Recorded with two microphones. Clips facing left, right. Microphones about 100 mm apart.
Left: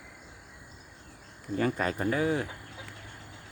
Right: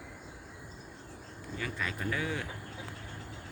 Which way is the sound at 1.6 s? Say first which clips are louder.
Left 9 dB; 40° left (ahead or behind).